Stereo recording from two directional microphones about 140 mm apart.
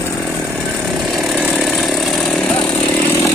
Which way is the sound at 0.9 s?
Centre (ahead or behind).